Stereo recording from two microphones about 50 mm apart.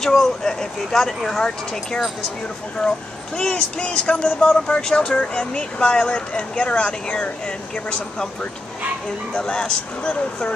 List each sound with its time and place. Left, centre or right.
0.0 s speech: centre
3.3 s speech: centre
9.3 s speech: centre